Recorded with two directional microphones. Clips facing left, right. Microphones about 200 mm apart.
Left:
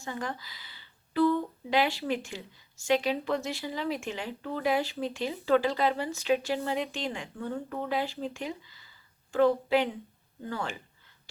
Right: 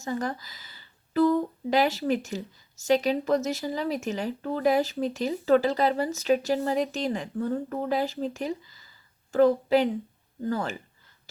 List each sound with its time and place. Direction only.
0.0 s a woman's voice: 40° right (ahead or behind)